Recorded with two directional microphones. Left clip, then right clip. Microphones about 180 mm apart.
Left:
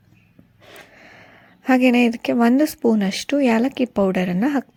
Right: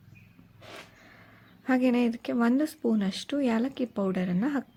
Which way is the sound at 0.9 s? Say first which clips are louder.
Left 9 dB; 35° left (ahead or behind).